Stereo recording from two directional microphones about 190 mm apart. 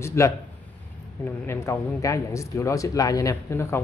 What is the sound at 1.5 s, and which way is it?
Speech, 15° left (ahead or behind).